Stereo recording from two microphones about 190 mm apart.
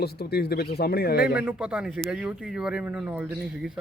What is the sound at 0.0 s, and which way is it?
A man's voice, 55° left (ahead or behind).